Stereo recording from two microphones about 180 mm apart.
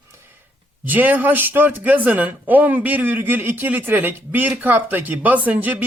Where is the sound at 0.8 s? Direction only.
10° right (ahead or behind).